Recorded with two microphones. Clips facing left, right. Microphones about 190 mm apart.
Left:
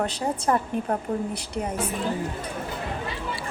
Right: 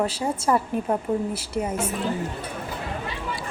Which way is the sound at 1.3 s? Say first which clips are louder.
Right 2 dB; 5° right (ahead or behind).